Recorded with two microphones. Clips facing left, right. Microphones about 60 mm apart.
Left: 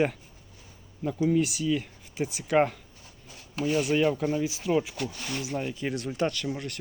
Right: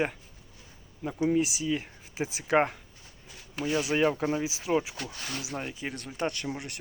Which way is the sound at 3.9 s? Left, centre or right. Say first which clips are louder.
Right 1 dB; right.